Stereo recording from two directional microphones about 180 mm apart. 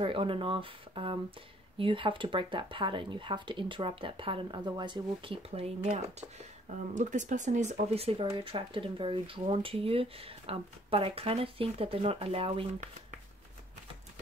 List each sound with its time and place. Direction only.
0.0 s speech: 30° right (ahead or behind)